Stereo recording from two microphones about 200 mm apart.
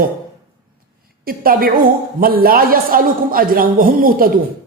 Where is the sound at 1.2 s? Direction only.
45° right (ahead or behind).